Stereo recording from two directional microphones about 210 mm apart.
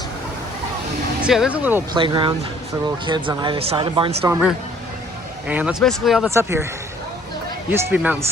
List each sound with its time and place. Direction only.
1.2 s speech: 5° right (ahead or behind)
1.9 s speech: 20° right (ahead or behind)
5.5 s speech: 5° right (ahead or behind)
6.3 s speech: 10° right (ahead or behind)
7.7 s speech: 10° right (ahead or behind)